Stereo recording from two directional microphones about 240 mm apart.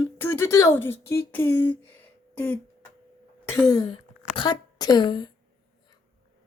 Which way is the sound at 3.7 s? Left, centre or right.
Centre.